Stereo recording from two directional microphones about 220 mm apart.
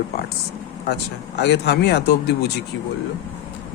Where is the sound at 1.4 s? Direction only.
50° left (ahead or behind).